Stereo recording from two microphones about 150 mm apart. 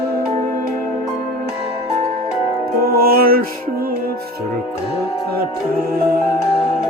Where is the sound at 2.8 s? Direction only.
85° right.